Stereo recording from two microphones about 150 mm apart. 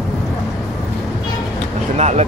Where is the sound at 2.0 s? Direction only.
45° right (ahead or behind).